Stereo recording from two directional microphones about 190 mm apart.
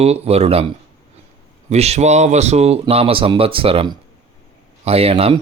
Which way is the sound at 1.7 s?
35° right (ahead or behind).